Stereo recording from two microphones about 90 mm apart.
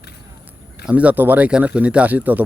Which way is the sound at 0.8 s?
15° right (ahead or behind).